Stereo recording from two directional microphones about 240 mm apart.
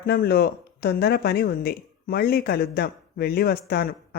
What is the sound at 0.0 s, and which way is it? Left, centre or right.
Speech, left.